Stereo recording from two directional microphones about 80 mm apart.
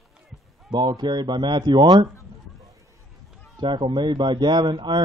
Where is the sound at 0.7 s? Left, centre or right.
Right.